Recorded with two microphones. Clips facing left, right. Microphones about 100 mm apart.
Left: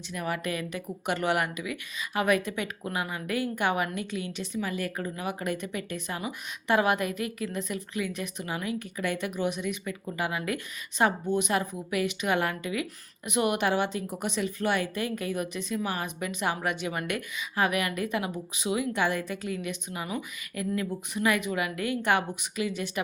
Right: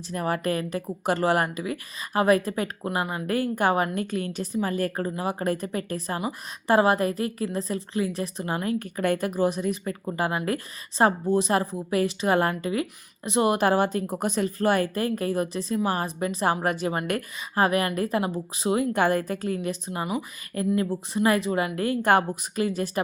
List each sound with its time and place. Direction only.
0.1 s a woman's voice: 40° right (ahead or behind)